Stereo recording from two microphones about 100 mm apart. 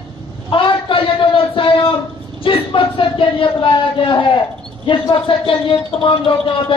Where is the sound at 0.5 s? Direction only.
60° left (ahead or behind).